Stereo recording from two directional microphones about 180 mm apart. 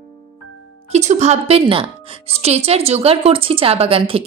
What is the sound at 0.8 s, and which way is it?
A woman's voice, 40° right (ahead or behind).